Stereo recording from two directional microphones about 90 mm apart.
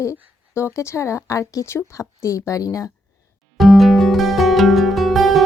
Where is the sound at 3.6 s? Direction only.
Centre (ahead or behind).